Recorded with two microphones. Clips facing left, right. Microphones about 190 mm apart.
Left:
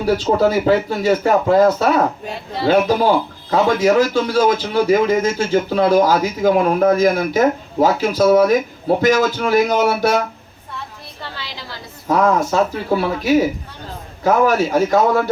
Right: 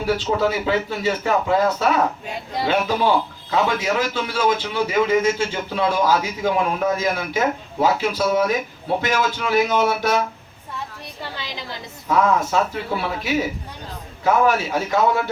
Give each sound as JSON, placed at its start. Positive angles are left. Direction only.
{"t": 0.3, "sound": "a man's voice", "side_deg": 45}
{"t": 11.2, "sound": "a sound", "side_deg": -20}
{"t": 12.0, "sound": "a man's voice", "side_deg": 40}